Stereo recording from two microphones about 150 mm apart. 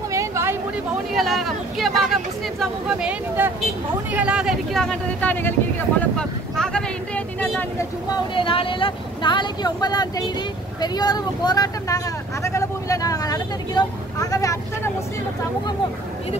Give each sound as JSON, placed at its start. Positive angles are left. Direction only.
{"t": 0.1, "sound": "a sound", "side_deg": -20}
{"t": 1.1, "sound": "speech", "side_deg": 0}
{"t": 8.1, "sound": "speech", "side_deg": 35}